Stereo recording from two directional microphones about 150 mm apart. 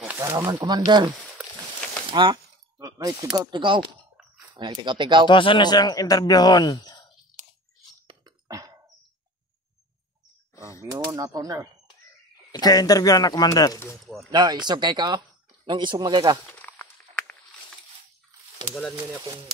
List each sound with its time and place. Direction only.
0.2 s speech: 15° right (ahead or behind)
0.5 s speech: 30° right (ahead or behind)
2.0 s a sound: 30° right (ahead or behind)
3.4 s speech: 35° right (ahead or behind)
5.3 s speech: 35° left (ahead or behind)
8.1 s beatboxing: 25° right (ahead or behind)
10.5 s a sound: 20° left (ahead or behind)
10.9 s speech: 25° right (ahead or behind)
12.4 s speech: 25° left (ahead or behind)
14.3 s speech: 25° right (ahead or behind)
16.4 s a sound: 10° left (ahead or behind)